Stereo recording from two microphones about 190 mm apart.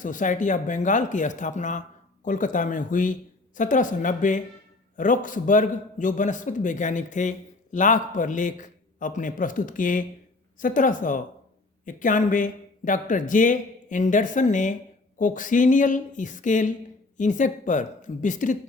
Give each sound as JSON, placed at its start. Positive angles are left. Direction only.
{"t": 0.0, "sound": "a man's voice", "side_deg": 45}